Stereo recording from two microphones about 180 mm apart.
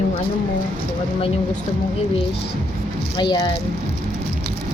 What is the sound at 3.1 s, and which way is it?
Speech, 20° left (ahead or behind).